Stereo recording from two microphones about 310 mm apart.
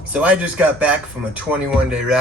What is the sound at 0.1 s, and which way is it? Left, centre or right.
Speech, centre.